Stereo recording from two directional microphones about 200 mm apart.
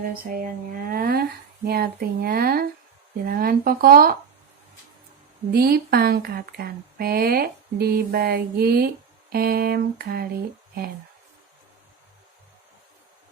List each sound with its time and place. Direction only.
0.3 s speech: 45° right (ahead or behind)
5.5 s speech: 50° right (ahead or behind)